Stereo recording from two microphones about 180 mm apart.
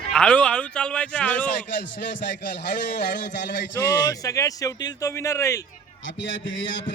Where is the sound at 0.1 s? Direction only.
5° left (ahead or behind).